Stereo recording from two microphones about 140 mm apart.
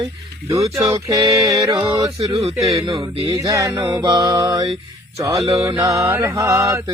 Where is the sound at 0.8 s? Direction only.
20° right (ahead or behind).